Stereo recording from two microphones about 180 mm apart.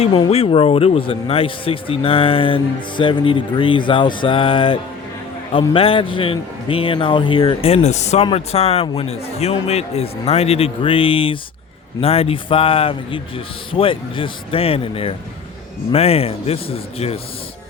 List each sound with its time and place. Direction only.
0.0 s a man's voice: 30° left (ahead or behind)